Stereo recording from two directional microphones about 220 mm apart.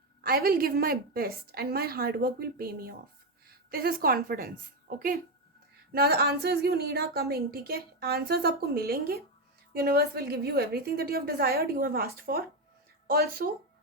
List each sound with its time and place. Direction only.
0.2 s a woman's voice: 45° right (ahead or behind)